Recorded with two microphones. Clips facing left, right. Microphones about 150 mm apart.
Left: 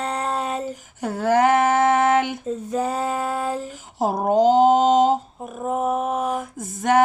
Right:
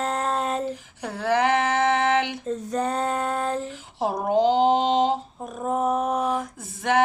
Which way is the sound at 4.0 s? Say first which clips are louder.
Left 3 dB; 40° left (ahead or behind).